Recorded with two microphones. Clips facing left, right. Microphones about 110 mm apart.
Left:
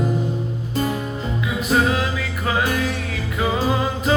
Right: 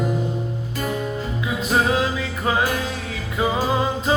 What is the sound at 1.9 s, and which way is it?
Music, 25° right (ahead or behind).